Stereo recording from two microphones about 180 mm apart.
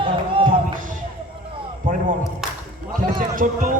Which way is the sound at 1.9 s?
45° right (ahead or behind).